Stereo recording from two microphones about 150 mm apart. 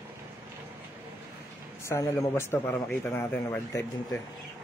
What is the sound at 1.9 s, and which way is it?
A man's voice, 20° left (ahead or behind).